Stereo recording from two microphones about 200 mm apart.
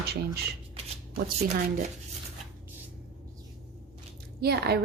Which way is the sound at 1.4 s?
40° right (ahead or behind).